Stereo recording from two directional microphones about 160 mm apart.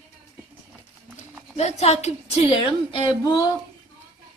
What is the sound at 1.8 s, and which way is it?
A woman's voice, 45° left (ahead or behind).